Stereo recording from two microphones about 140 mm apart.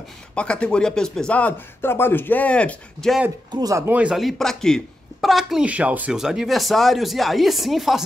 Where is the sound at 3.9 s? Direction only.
5° right (ahead or behind).